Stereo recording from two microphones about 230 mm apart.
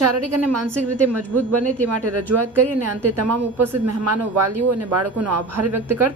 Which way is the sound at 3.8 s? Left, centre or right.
Right.